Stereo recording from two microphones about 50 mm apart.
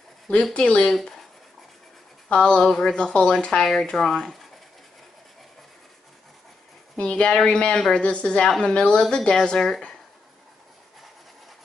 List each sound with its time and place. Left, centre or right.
0.3 s speech: centre
2.2 s speech: centre
7.0 s speech: left